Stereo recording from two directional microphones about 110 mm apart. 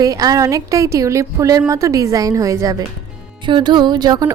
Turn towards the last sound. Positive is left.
turn(degrees=-35)  # may be behind; listen again after turning